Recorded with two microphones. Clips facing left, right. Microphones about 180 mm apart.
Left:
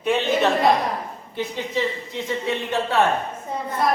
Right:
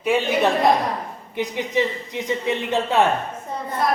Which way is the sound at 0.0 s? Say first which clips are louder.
Right 1 dB; 10° right (ahead or behind).